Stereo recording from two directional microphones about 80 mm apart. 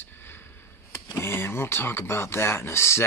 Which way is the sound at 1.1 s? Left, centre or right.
Left.